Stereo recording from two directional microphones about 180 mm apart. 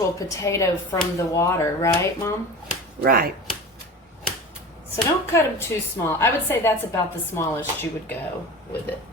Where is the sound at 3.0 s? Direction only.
55° right (ahead or behind).